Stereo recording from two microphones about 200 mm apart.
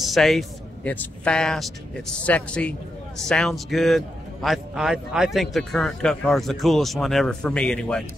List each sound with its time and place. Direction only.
0.0 s a man's voice: centre (ahead or behind)